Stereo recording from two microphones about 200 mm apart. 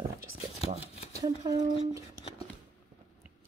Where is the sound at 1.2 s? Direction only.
20° right (ahead or behind).